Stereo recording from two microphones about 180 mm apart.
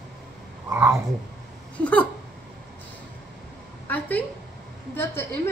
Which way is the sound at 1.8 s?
10° left (ahead or behind).